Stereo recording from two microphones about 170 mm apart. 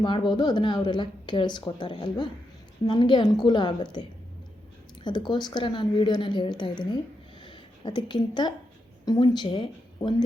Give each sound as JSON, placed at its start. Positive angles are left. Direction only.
{"t": 0.0, "sound": "speech", "side_deg": 25}
{"t": 5.0, "sound": "a woman's voice", "side_deg": 25}